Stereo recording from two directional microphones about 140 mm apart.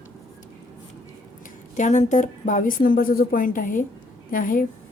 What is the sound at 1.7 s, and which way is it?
A woman's voice, 60° left (ahead or behind).